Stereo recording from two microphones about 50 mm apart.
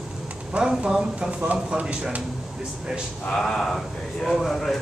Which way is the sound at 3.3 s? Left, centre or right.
Centre.